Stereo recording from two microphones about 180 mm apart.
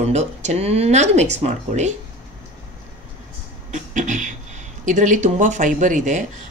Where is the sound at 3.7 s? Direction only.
45° right (ahead or behind).